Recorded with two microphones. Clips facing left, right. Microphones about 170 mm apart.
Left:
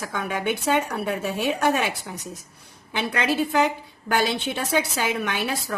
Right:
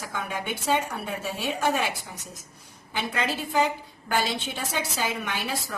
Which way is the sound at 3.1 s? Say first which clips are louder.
Left 6 dB; 70° left (ahead or behind).